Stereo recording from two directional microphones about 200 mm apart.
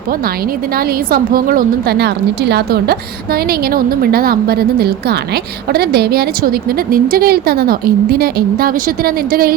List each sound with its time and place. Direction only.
0.8 s a woman's voice: 50° right (ahead or behind)